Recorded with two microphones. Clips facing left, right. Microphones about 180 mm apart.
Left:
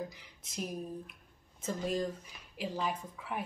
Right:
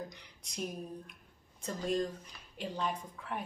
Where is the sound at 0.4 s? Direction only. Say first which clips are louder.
Even; centre (ahead or behind).